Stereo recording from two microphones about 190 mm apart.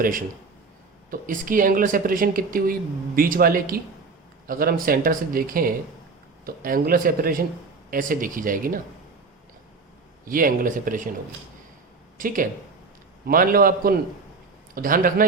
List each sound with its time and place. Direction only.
0.0 s speech: 45° right (ahead or behind)
10.2 s speech: 50° right (ahead or behind)
12.1 s speech: 45° right (ahead or behind)